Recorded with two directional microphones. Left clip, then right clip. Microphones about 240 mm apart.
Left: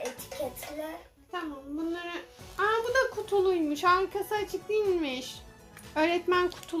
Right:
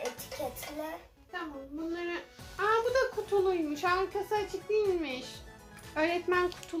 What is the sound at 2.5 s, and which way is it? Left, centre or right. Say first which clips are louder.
A woman's voice: left 1 dB; left.